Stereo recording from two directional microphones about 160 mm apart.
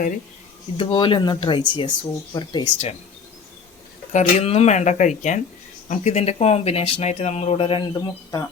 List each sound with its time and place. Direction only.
0.8 s speech: 35° left (ahead or behind)
4.1 s speech: 45° left (ahead or behind); by 8.4 s 25° left (ahead or behind)